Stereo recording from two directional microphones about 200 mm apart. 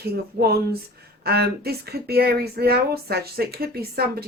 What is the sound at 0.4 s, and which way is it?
Speech, 50° right (ahead or behind).